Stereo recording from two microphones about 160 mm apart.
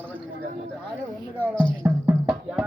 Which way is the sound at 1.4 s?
5° left (ahead or behind).